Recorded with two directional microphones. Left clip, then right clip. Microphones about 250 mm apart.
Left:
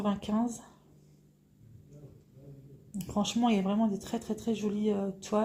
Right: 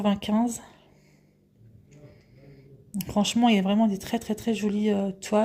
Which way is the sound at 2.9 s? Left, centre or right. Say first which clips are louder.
Right 6 dB; right.